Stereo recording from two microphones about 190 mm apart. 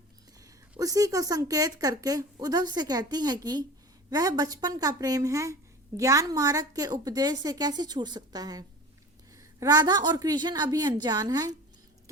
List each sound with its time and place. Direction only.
0.8 s a woman's voice: 20° right (ahead or behind)